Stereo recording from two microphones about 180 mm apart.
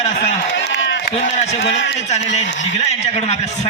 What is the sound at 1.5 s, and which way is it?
Speech, 75° left (ahead or behind).